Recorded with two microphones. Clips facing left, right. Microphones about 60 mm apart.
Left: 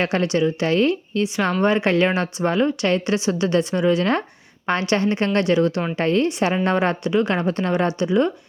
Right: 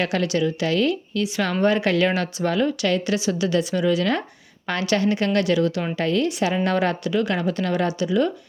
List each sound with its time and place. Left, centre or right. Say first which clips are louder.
0.0 s speech: left 2 dB; left